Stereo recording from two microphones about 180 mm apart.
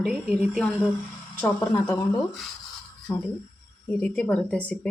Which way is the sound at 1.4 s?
10° left (ahead or behind).